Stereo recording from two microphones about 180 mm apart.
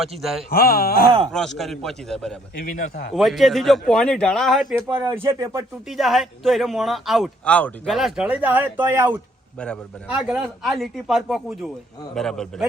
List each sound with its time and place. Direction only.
0.2 s a man's voice: centre (ahead or behind)
0.5 s speech: 55° left (ahead or behind)
1.3 s a man's voice: centre (ahead or behind)
2.6 s a man's voice: 50° left (ahead or behind)
3.2 s a man's voice: centre (ahead or behind)
4.9 s speech: 15° right (ahead or behind)
5.9 s a man's voice: centre (ahead or behind)
9.6 s a man's voice: 5° left (ahead or behind)
10.1 s a man's voice: 5° right (ahead or behind)